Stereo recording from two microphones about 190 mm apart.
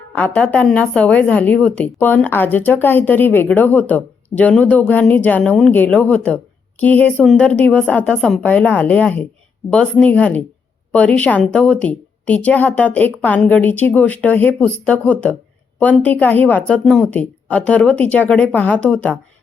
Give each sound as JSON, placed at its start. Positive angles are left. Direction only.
{"t": 0.1, "sound": "a woman's voice", "side_deg": 5}